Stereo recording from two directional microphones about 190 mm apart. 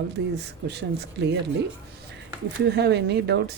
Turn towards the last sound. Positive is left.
turn(degrees=-60)  # may be behind; listen again after turning